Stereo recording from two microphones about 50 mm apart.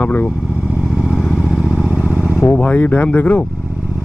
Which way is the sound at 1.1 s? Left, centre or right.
Centre.